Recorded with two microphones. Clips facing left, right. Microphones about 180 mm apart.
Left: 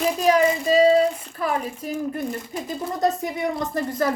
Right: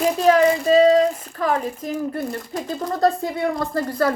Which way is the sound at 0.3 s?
10° left (ahead or behind).